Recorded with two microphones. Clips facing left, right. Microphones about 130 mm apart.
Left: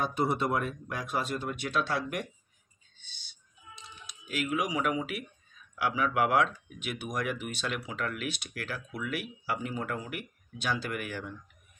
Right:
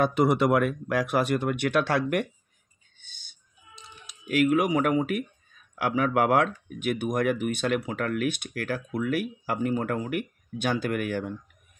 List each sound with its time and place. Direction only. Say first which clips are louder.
0.0 s speech: right 7 dB; 85° right; by 2.2 s 60° right (ahead or behind)
3.0 s bird: even; 50° right (ahead or behind)
4.3 s speech: right 9 dB; 55° right (ahead or behind)